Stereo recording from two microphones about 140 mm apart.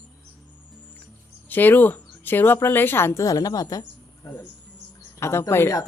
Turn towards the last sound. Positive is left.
turn(degrees=20)  # may be behind; listen again after turning